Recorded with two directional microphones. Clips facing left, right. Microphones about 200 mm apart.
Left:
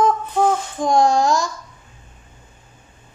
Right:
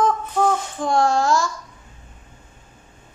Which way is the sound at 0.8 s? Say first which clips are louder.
Left 3 dB; 15° left (ahead or behind).